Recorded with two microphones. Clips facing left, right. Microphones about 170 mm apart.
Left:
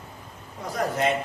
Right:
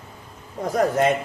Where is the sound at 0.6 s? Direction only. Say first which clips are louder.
Right 6 dB; 45° right (ahead or behind).